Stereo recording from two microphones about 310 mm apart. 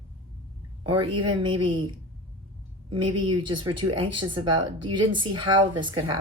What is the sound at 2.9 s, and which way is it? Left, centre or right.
A woman's voice, centre.